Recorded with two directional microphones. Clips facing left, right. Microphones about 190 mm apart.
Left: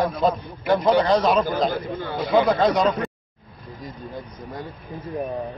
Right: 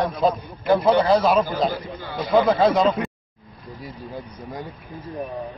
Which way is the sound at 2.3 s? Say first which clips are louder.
Right 1 dB; centre (ahead or behind).